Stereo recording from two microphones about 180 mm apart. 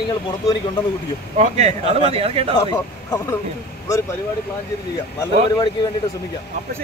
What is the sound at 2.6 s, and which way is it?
Speech, 20° left (ahead or behind).